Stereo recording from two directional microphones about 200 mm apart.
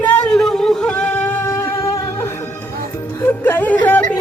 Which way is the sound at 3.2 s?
10° left (ahead or behind).